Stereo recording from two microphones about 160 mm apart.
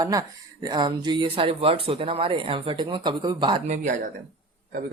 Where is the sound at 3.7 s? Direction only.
50° right (ahead or behind).